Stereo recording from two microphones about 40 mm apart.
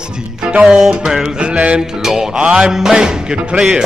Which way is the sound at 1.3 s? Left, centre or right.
Right.